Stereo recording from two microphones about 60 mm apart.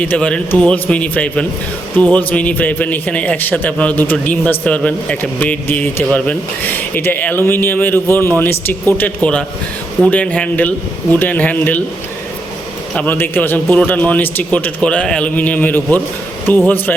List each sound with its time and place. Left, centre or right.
0.0 s speech: centre; by 9.0 s left
9.0 s speech: centre
13.1 s speech: left
14.8 s speech: centre